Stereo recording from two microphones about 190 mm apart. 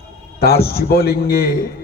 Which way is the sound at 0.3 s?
55° left (ahead or behind).